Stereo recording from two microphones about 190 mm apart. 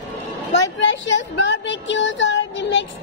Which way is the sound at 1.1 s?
70° left (ahead or behind).